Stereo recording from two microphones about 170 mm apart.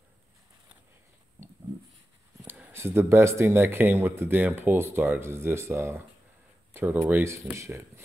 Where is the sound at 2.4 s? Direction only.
10° right (ahead or behind).